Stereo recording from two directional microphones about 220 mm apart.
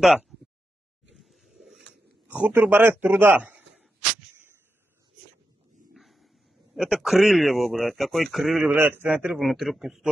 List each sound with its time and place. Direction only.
0.0 s a sound: 5° right (ahead or behind)
2.2 s a man's voice: 5° right (ahead or behind)
5.9 s a man's voice: centre (ahead or behind)